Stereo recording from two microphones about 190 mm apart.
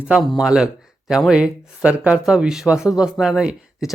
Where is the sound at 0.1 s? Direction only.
5° right (ahead or behind).